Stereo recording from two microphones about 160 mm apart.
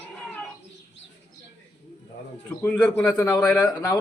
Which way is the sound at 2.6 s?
10° left (ahead or behind).